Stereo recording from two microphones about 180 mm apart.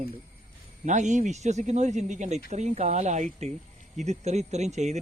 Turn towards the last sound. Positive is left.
turn(degrees=-40)  # may be behind; listen again after turning